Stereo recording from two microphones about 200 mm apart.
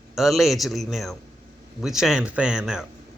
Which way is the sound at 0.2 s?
Centre (ahead or behind).